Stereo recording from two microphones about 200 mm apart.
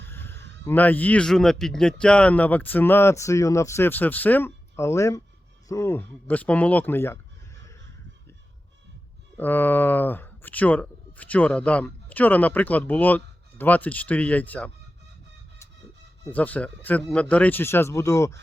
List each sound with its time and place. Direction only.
0.0 s fowl: 10° left (ahead or behind)
0.6 s speech: 10° left (ahead or behind)
9.4 s speech: 10° left (ahead or behind)
16.3 s speech: 10° left (ahead or behind)